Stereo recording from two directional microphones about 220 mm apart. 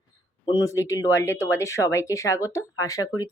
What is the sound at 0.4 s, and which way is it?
Speech, 20° left (ahead or behind).